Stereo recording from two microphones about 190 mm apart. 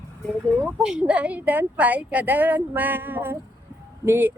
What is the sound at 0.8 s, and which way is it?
A woman's voice, 5° right (ahead or behind).